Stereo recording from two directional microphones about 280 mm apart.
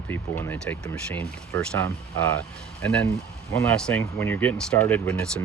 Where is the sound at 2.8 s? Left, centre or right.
Centre.